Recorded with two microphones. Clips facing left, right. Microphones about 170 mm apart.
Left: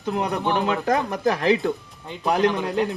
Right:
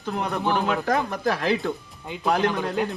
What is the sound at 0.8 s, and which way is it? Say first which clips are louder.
Speech: left 2 dB; 20° left (ahead or behind).